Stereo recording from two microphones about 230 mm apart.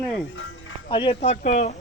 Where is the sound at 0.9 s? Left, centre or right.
Left.